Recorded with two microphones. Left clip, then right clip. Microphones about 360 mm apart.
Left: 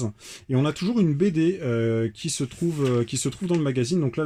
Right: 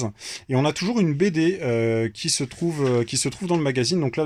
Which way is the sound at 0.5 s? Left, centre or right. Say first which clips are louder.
Right 2 dB; centre.